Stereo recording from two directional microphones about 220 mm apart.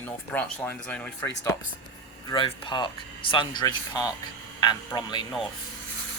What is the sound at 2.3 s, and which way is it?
Speech, 25° left (ahead or behind).